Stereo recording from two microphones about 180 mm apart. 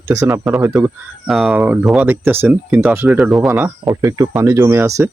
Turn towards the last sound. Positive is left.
turn(degrees=-15)  # may be behind; listen again after turning